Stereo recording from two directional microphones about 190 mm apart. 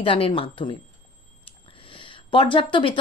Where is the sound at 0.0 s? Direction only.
25° left (ahead or behind).